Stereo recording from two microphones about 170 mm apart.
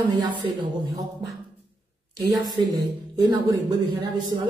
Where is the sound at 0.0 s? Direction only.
25° right (ahead or behind).